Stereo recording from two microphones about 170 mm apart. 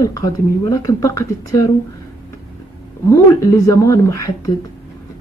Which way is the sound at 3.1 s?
20° left (ahead or behind).